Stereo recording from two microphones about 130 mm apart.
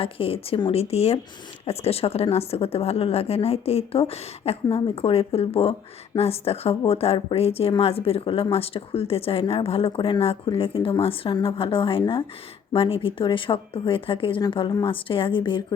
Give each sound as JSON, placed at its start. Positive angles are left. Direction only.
{"t": 0.0, "sound": "a woman's voice", "side_deg": 45}